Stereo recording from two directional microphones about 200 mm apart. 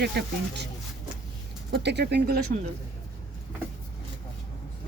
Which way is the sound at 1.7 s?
60° right (ahead or behind).